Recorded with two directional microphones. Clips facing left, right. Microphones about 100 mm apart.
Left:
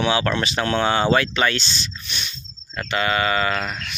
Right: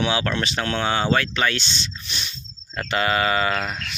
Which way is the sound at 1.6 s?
25° right (ahead or behind).